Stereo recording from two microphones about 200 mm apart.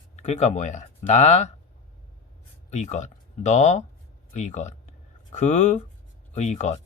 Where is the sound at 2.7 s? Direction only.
35° left (ahead or behind).